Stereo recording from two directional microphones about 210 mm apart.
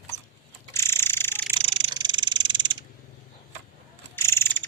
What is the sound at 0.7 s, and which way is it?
Bird, 10° left (ahead or behind).